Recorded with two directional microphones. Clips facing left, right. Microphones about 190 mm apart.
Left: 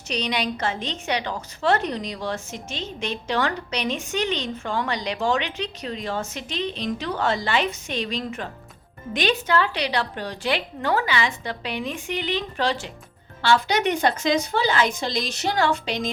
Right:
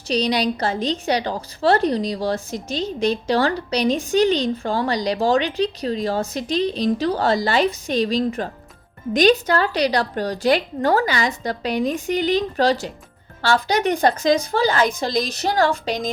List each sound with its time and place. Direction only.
0.1 s a woman's voice: 35° right (ahead or behind)